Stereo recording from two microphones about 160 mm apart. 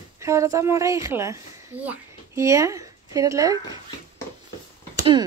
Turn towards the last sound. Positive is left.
turn(degrees=-25)  # may be behind; listen again after turning